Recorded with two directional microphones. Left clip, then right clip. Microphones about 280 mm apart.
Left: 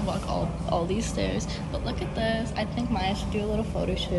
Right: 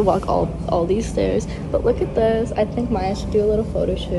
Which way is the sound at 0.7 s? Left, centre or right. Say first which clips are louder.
Right 5 dB; centre.